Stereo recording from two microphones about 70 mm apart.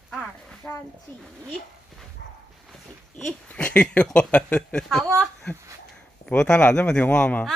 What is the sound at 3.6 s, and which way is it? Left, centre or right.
Speech, centre.